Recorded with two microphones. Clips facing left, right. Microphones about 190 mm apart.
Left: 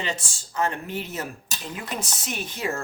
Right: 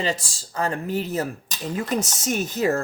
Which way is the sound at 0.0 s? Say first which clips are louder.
Right 5 dB; 35° right (ahead or behind).